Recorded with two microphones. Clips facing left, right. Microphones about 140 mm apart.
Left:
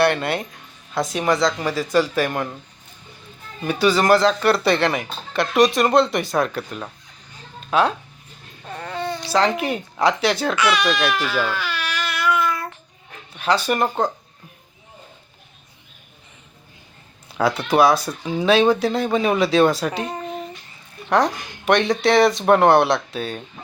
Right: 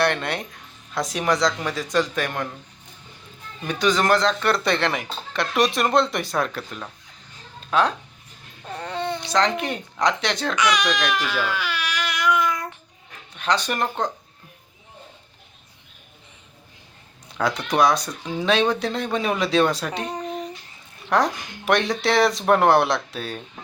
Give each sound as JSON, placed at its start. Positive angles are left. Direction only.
{"t": 0.0, "sound": "speech", "side_deg": 5}
{"t": 3.6, "sound": "speech", "side_deg": 5}
{"t": 8.8, "sound": "babbling", "side_deg": -25}
{"t": 9.3, "sound": "speech", "side_deg": 5}
{"t": 11.5, "sound": "baby cry", "side_deg": -10}
{"t": 13.3, "sound": "speech", "side_deg": 5}
{"t": 17.3, "sound": "speech", "side_deg": 5}